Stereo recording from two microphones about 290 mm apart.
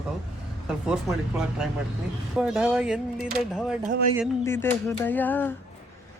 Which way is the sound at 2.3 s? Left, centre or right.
Centre.